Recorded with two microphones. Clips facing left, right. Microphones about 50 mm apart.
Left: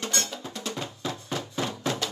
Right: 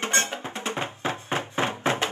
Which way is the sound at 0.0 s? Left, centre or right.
Right.